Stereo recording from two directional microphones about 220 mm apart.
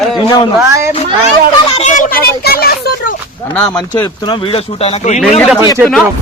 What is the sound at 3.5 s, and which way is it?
Speech, 10° left (ahead or behind).